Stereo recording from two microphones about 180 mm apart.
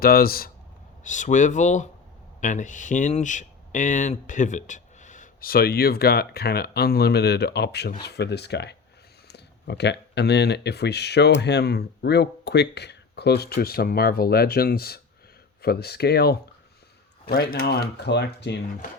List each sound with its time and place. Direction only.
0.0 s speech: 55° left (ahead or behind)
1.0 s speech: 45° left (ahead or behind); by 16.4 s 65° left (ahead or behind)
17.5 s speech: 60° left (ahead or behind)